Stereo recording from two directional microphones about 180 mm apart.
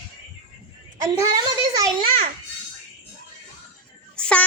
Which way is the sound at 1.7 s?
25° right (ahead or behind).